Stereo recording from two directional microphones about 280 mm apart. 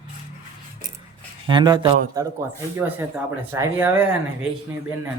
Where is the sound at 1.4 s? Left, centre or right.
Centre.